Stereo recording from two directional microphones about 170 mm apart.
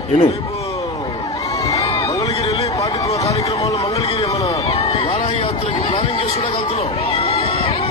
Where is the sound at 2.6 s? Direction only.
20° left (ahead or behind).